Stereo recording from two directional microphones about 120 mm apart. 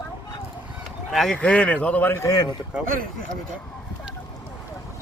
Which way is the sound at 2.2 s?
35° left (ahead or behind).